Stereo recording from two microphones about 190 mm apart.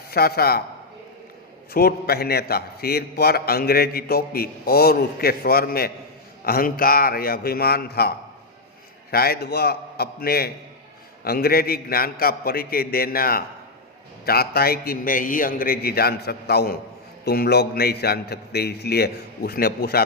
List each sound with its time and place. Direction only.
0.1 s a man's voice: 55° left (ahead or behind)
1.7 s a man's voice: 55° left (ahead or behind)